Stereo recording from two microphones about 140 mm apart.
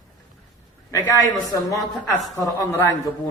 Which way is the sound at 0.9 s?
25° left (ahead or behind).